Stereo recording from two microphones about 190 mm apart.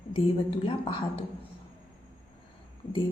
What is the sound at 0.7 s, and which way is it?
Speech, 25° left (ahead or behind).